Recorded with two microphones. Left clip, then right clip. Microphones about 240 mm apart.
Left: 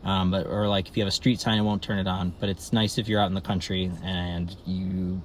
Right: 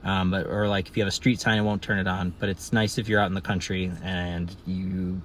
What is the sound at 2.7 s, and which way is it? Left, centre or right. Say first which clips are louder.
Speech: right 1 dB; centre.